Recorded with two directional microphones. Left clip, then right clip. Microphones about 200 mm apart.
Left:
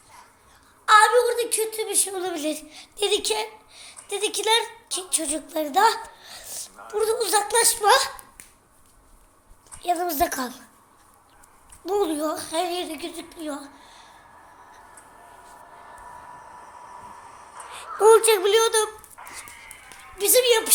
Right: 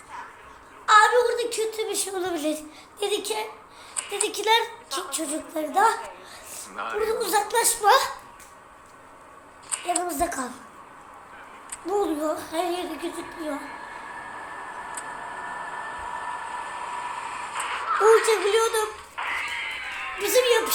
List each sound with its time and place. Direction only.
0.9 s a woman's voice: 25° left (ahead or behind)
2.7 s a woman's voice: 35° left (ahead or behind)
9.8 s a woman's voice: 30° left (ahead or behind)
11.9 s speech: 35° left (ahead or behind)
17.6 s a sound: 40° right (ahead or behind)
18.3 s speech: 30° left (ahead or behind)
19.1 s a sound: 40° right (ahead or behind)
20.1 s speech: 35° left (ahead or behind)